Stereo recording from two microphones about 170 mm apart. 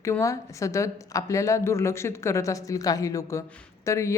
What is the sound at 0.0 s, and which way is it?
Speech, 15° left (ahead or behind).